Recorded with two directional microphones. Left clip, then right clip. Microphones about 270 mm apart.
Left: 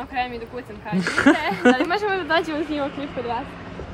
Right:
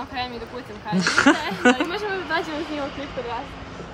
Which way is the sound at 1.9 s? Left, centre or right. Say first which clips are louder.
Left 4 dB; centre.